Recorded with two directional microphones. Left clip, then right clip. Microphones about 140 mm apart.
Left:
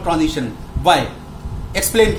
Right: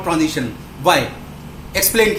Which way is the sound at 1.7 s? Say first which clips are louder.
Left 1 dB; 20° left (ahead or behind).